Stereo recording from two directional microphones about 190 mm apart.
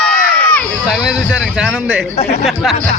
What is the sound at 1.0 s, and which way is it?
A man's voice, 5° right (ahead or behind).